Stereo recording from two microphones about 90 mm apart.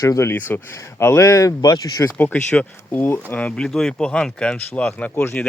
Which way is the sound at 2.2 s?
20° left (ahead or behind).